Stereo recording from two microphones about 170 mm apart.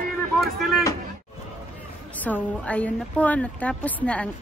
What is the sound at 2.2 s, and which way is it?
Speech, 10° left (ahead or behind).